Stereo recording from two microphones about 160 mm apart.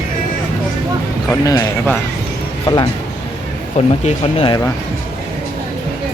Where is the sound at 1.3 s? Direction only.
20° left (ahead or behind).